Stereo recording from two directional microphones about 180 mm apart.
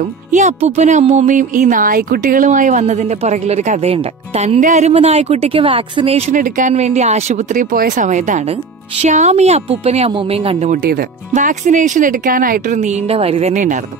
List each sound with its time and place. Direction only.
0.3 s speech: 40° right (ahead or behind)
10.9 s speech: 50° right (ahead or behind)